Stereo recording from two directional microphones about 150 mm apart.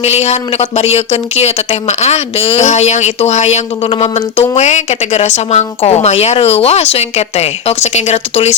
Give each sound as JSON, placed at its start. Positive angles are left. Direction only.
{"t": 0.0, "sound": "speech", "side_deg": 45}